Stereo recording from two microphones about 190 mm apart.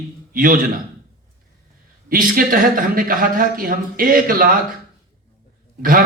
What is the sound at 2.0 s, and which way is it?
A man's voice, 50° right (ahead or behind).